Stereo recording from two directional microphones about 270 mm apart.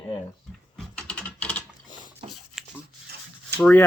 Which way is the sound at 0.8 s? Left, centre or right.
Centre.